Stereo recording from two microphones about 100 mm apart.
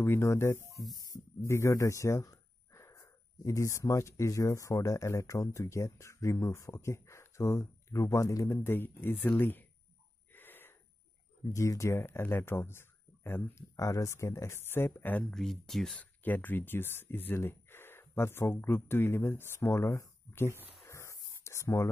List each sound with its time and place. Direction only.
0.0 s speech: 30° left (ahead or behind)
0.8 s speech: 35° left (ahead or behind)
8.6 s speech: 20° left (ahead or behind)
10.3 s wheeze: 20° left (ahead or behind)
11.4 s speech: 30° left (ahead or behind)
13.7 s speech: 35° left (ahead or behind)
15.3 s speech: 5° left (ahead or behind); by 20.5 s 30° left (ahead or behind)
20.8 s a sound: 30° left (ahead or behind)